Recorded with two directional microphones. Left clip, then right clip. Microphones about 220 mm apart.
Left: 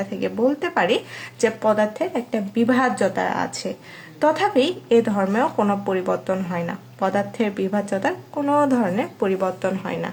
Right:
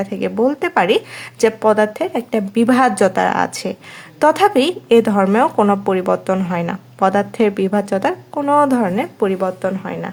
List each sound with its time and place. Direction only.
0.0 s speech: 35° right (ahead or behind)